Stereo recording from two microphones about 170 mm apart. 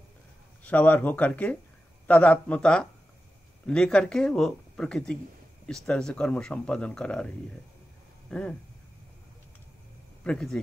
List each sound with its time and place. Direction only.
0.7 s speech: 10° left (ahead or behind)
10.2 s speech: 5° left (ahead or behind)